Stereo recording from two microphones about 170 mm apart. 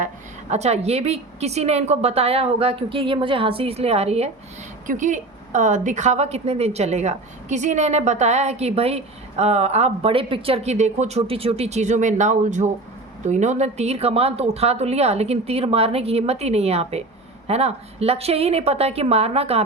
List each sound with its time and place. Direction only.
0.5 s a woman's voice: 40° right (ahead or behind)